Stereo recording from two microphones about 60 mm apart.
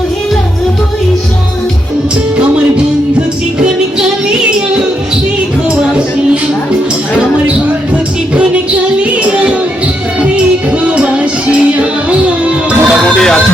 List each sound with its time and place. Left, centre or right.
4.3 s child singing: centre
9.0 s music: right
13.1 s a sound: centre